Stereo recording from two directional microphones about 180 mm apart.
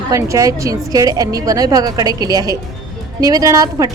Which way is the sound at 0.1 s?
15° right (ahead or behind).